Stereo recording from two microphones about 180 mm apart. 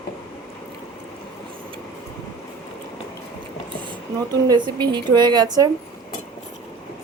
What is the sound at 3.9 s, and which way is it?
Speech, 25° right (ahead or behind).